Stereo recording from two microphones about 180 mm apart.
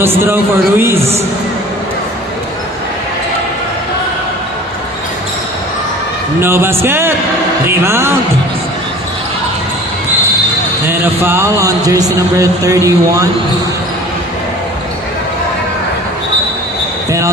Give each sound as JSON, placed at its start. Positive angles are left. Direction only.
{"t": 0.0, "sound": "speech", "side_deg": -10}
{"t": 0.9, "sound": "a man's voice", "side_deg": -35}
{"t": 6.4, "sound": "speech", "side_deg": -15}
{"t": 10.8, "sound": "speech", "side_deg": -10}
{"t": 17.1, "sound": "basketball bounce", "side_deg": -15}